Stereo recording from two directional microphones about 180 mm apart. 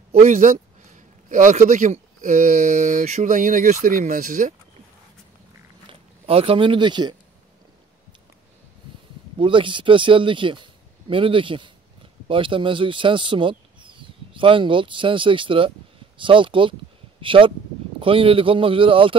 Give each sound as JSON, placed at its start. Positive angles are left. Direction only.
{"t": 0.2, "sound": "speech", "side_deg": -45}
{"t": 5.9, "sound": "speech", "side_deg": -30}
{"t": 9.4, "sound": "speech", "side_deg": -30}